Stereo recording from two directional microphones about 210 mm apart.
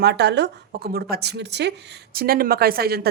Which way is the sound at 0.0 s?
55° right (ahead or behind).